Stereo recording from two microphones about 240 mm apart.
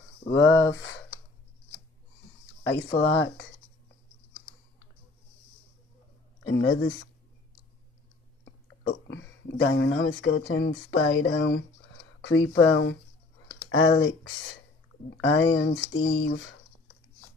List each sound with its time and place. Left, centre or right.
0.2 s speech: left
2.6 s speech: left
6.4 s speech: left
8.5 s speech: left